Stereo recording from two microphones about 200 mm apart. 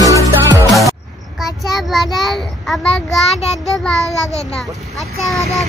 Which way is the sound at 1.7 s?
Centre (ahead or behind).